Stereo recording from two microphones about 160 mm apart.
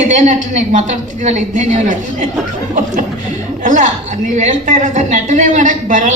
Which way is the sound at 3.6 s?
55° right (ahead or behind).